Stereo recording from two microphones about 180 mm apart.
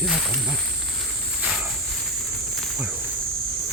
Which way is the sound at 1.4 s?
Centre (ahead or behind).